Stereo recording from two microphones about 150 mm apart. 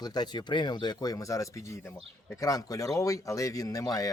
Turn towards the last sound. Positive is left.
turn(degrees=25)  # may be behind; listen again after turning